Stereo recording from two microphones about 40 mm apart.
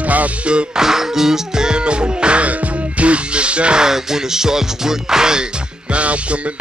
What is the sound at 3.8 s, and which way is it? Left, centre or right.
Music, centre.